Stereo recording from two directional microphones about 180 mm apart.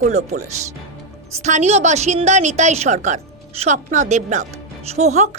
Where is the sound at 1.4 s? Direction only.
40° right (ahead or behind).